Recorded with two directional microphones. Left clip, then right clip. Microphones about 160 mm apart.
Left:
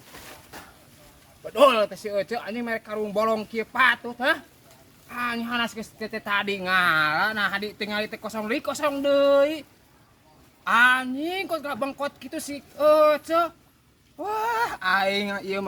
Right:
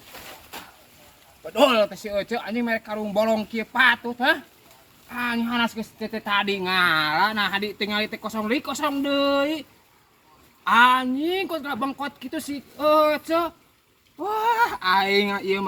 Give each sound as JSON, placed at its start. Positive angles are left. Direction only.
{"t": 1.5, "sound": "a woman's voice", "side_deg": 10}